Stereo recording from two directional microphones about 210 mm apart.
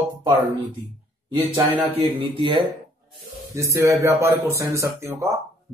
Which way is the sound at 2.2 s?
25° right (ahead or behind).